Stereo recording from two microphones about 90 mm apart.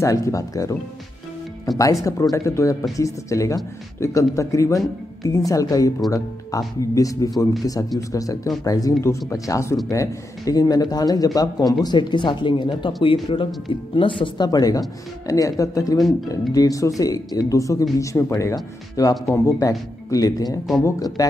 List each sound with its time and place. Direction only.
0.0 s speech: 40° left (ahead or behind)
2.3 s speech: 35° left (ahead or behind)
11.8 s speech: 55° left (ahead or behind); by 14.3 s 70° left (ahead or behind)
14.4 s speech: 45° left (ahead or behind)
20.1 s speech: 45° left (ahead or behind)